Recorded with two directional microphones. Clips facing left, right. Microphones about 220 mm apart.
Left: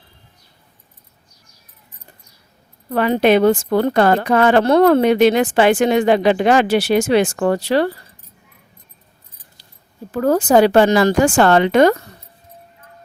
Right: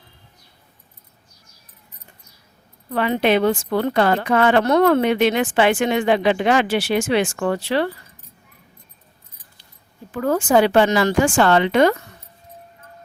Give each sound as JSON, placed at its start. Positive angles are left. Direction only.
{"t": 2.9, "sound": "a woman's voice", "side_deg": 45}
{"t": 10.1, "sound": "a woman's voice", "side_deg": 40}